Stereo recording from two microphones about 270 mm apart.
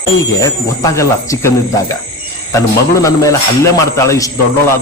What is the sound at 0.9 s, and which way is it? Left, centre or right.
Speech, centre.